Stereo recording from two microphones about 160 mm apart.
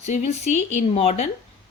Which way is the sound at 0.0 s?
45° left (ahead or behind).